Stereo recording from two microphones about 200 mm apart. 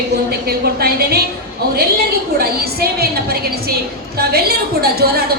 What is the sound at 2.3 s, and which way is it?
A woman's voice, 50° right (ahead or behind).